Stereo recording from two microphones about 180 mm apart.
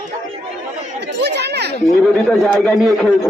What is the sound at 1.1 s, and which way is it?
Chatter, 70° right (ahead or behind).